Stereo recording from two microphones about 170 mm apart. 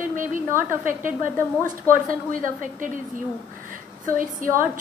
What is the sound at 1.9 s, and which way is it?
A woman's voice, 50° right (ahead or behind).